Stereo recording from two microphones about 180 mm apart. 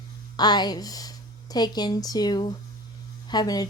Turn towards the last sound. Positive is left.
turn(degrees=20)  # may be behind; listen again after turning